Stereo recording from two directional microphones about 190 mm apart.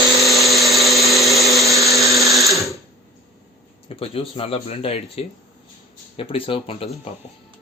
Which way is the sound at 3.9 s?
30° left (ahead or behind).